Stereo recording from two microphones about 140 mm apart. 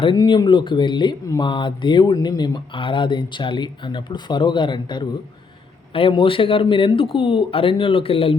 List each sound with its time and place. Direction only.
0.0 s speech: 35° left (ahead or behind)